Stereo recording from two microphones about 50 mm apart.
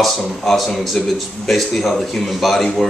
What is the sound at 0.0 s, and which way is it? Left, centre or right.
Speech, centre.